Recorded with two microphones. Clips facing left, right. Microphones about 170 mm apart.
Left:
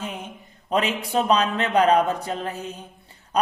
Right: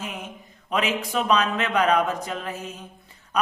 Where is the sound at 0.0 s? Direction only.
30° left (ahead or behind).